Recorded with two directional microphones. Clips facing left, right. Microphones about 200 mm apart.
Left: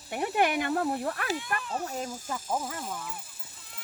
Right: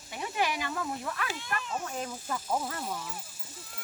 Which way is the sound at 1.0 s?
40° left (ahead or behind).